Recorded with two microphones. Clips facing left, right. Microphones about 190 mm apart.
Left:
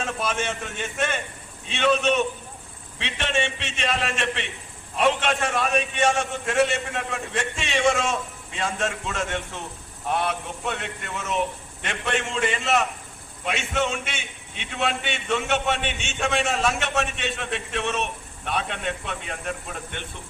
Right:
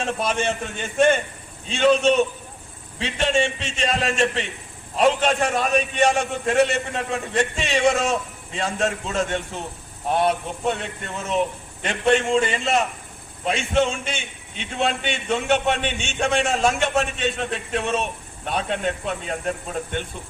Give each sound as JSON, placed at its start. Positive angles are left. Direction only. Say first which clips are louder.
{"t": 0.2, "sound": "a man's voice", "louder": "right 4 dB", "side_deg": -30}